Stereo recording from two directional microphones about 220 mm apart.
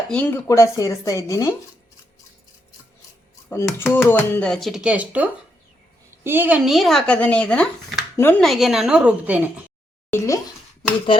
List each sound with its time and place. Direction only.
0.1 s chopping: 10° left (ahead or behind)
3.5 s chopping: 10° left (ahead or behind)
3.9 s speech: 10° left (ahead or behind); by 9.6 s 5° right (ahead or behind)
10.1 s speech: 15° left (ahead or behind)
11.1 s a sound: 20° left (ahead or behind)